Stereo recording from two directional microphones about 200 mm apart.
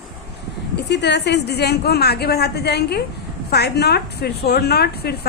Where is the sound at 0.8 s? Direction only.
60° left (ahead or behind).